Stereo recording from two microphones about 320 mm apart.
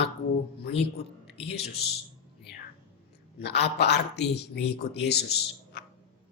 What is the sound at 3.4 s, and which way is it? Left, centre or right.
A man's voice, left.